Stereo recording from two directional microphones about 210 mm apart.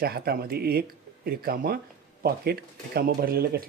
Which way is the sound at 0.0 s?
45° right (ahead or behind).